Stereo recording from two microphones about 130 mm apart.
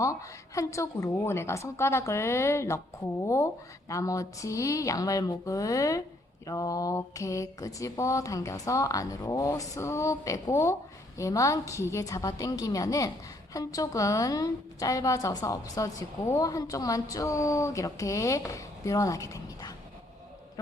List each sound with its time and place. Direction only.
0.0 s a woman's voice: 25° left (ahead or behind)